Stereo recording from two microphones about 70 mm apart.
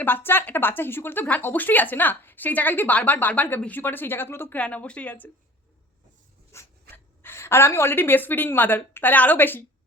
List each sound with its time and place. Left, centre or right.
0.0 s speech: left
4.5 s speech: centre
6.5 s dog: left
6.9 s a woman's voice: left